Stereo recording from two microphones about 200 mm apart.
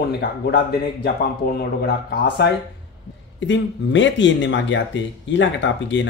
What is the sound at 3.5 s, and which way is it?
Speech, 65° left (ahead or behind).